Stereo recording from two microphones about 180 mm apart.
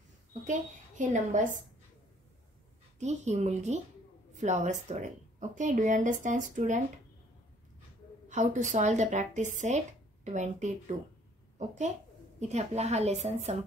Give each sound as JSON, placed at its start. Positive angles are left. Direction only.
{"t": 0.5, "sound": "a woman's voice", "side_deg": -45}
{"t": 3.0, "sound": "a woman's voice", "side_deg": -40}
{"t": 8.3, "sound": "speech", "side_deg": -45}
{"t": 12.4, "sound": "speech", "side_deg": -40}